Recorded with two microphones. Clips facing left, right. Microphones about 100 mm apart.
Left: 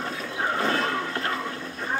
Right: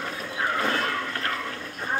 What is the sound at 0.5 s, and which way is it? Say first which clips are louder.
Vehicle: left 2 dB; 30° left (ahead or behind).